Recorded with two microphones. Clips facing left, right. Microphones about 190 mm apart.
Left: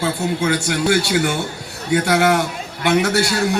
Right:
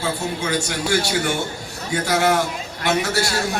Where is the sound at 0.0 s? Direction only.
65° left (ahead or behind).